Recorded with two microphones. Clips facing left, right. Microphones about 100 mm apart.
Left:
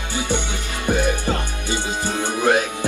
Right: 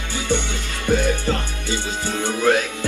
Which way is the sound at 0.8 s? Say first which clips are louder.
Right 1 dB; 15° left (ahead or behind).